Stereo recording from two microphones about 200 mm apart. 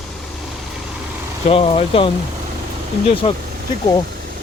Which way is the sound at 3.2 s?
30° left (ahead or behind).